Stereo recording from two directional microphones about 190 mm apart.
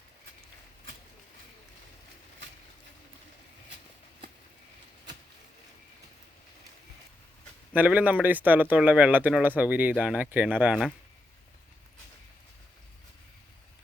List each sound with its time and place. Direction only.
7.7 s speech: 10° right (ahead or behind)